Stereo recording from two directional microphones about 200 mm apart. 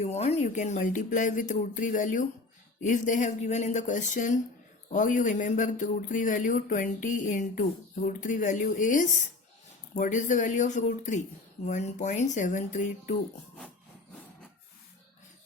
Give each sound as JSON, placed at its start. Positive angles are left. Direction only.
{"t": 0.0, "sound": "speech", "side_deg": 35}